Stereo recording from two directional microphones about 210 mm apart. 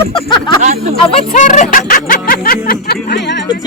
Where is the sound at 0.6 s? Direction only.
35° right (ahead or behind).